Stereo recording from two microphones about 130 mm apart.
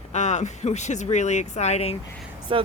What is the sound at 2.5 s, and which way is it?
Speech, 40° right (ahead or behind).